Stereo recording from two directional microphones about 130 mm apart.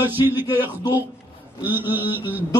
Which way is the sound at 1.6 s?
15° right (ahead or behind).